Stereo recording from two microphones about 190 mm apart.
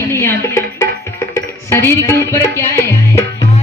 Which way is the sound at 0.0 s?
15° left (ahead or behind).